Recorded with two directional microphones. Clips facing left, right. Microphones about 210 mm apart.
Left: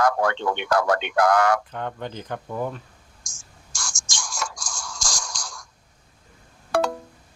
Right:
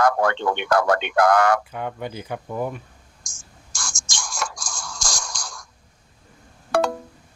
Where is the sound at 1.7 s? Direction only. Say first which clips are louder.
Right 1 dB; 10° right (ahead or behind).